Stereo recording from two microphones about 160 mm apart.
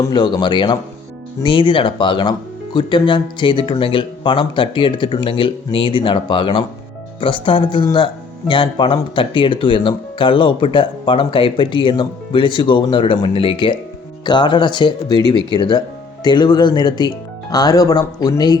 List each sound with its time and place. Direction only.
0.0 s speech: 25° left (ahead or behind)